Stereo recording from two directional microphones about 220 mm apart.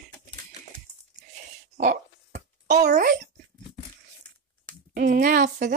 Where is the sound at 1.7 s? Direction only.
35° right (ahead or behind).